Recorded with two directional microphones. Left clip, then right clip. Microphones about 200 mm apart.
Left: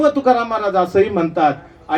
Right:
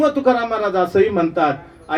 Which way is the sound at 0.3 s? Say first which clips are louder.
Left 1 dB; 40° left (ahead or behind).